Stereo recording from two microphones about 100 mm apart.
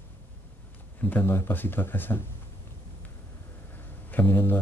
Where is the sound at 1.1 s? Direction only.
20° left (ahead or behind).